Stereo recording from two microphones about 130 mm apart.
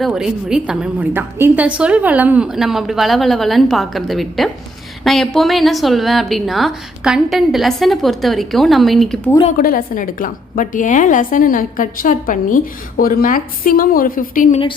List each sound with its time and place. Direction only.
0.0 s a woman's voice: 5° right (ahead or behind)
9.6 s a woman's voice: 90° left